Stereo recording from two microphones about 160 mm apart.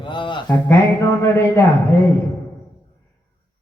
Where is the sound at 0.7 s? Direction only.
20° left (ahead or behind).